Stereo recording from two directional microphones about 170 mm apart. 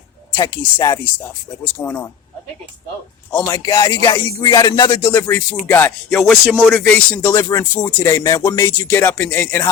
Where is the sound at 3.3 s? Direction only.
20° left (ahead or behind).